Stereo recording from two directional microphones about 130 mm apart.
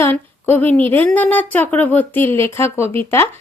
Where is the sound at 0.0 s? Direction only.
15° left (ahead or behind).